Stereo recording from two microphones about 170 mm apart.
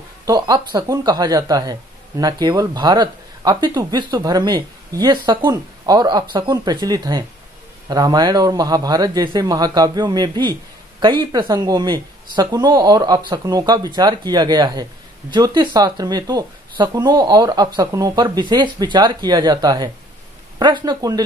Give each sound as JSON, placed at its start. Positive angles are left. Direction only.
{"t": 0.2, "sound": "speech", "side_deg": -25}